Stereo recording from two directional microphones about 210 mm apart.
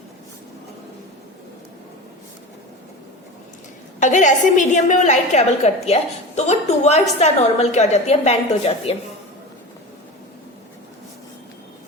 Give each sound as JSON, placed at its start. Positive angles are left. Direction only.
{"t": 4.0, "sound": "a woman's voice", "side_deg": 35}